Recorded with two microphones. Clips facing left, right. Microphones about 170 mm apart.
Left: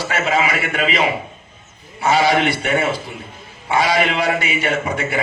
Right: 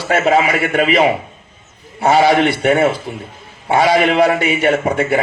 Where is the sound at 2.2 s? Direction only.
35° right (ahead or behind).